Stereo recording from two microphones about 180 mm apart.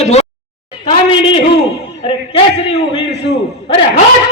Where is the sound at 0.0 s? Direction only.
35° left (ahead or behind).